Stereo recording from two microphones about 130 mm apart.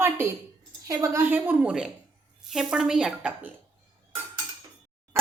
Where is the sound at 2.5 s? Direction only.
5° right (ahead or behind).